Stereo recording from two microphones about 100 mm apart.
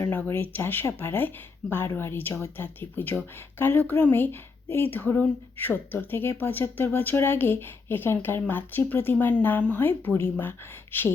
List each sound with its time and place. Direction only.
0.3 s speech: 20° left (ahead or behind)